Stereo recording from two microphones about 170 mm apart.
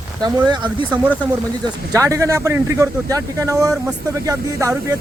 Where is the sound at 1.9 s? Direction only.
20° right (ahead or behind).